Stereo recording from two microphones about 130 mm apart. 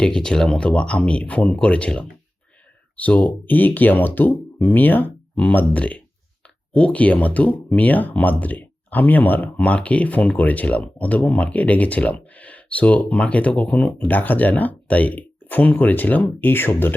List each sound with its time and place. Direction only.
0.0 s speech: 5° left (ahead or behind)